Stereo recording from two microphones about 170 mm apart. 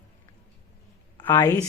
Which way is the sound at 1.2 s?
25° left (ahead or behind).